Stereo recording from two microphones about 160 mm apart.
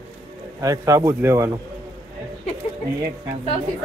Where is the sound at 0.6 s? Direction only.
20° right (ahead or behind).